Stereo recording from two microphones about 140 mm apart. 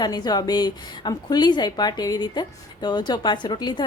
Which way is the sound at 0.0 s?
30° left (ahead or behind).